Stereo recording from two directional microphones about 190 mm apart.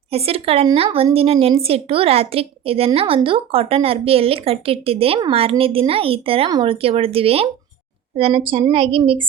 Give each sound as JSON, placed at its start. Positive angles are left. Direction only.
{"t": 0.1, "sound": "a woman's voice", "side_deg": -30}